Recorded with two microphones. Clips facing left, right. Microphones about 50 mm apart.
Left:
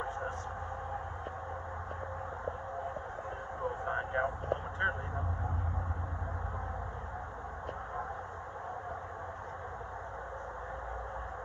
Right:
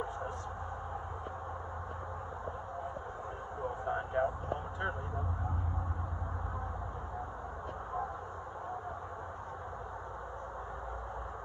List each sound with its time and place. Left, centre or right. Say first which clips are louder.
3.8 s vehicle: right 1 dB; left